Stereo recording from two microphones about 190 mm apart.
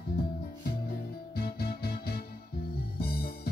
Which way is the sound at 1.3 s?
55° left (ahead or behind).